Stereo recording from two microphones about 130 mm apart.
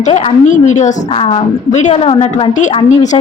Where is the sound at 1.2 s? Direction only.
45° left (ahead or behind).